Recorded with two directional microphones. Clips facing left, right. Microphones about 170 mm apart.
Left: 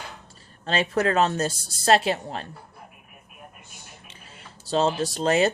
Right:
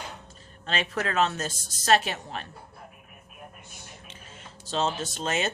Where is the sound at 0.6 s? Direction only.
35° left (ahead or behind).